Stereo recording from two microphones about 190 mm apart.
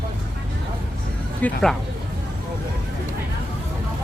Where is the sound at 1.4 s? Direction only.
Centre (ahead or behind).